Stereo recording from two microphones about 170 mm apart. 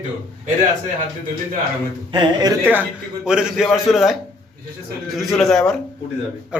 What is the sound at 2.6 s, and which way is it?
A man's voice, 10° right (ahead or behind).